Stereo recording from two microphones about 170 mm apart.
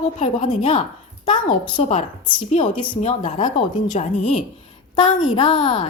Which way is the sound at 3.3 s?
30° left (ahead or behind).